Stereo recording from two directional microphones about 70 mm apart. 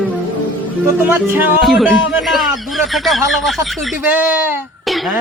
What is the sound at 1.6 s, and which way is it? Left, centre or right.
A man's voice, centre.